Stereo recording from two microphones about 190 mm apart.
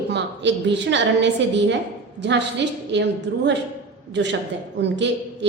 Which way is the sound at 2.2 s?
65° right (ahead or behind).